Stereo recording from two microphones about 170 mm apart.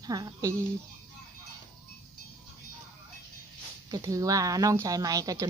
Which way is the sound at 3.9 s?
20° right (ahead or behind).